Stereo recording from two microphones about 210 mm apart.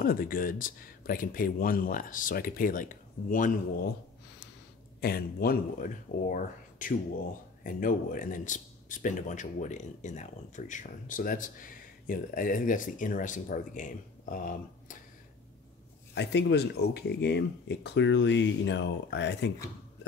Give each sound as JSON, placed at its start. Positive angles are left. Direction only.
{"t": 0.0, "sound": "speech", "side_deg": 45}
{"t": 5.0, "sound": "speech", "side_deg": 45}
{"t": 16.2, "sound": "speech", "side_deg": 55}